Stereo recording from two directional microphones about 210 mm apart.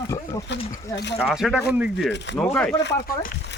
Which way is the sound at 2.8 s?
45° left (ahead or behind).